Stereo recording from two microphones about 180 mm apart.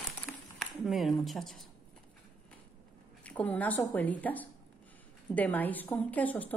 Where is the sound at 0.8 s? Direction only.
Centre (ahead or behind).